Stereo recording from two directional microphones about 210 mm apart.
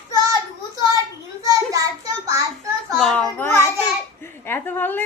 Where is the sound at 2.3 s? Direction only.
15° right (ahead or behind).